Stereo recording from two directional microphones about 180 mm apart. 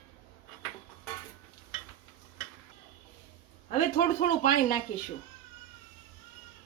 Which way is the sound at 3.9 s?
45° left (ahead or behind).